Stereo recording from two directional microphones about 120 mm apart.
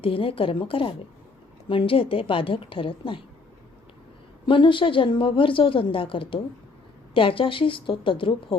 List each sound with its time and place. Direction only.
0.0 s a woman's voice: 50° left (ahead or behind)
4.4 s a woman's voice: 45° left (ahead or behind)